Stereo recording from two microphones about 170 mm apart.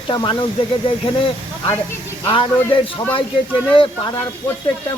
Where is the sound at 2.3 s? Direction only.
30° left (ahead or behind).